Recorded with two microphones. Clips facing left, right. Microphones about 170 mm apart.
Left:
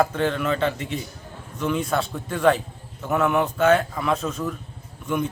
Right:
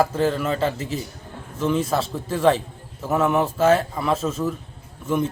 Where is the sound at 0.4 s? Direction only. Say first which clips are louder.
Even; 35° right (ahead or behind).